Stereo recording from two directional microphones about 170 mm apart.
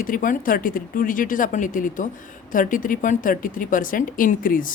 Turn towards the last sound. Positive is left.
turn(degrees=55)  # may be behind; listen again after turning